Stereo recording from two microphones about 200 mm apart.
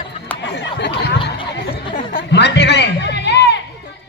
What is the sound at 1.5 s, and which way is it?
Chatter, 55° left (ahead or behind).